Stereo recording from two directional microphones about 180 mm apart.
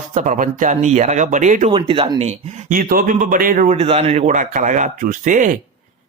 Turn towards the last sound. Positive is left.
turn(degrees=-45)  # may be behind; listen again after turning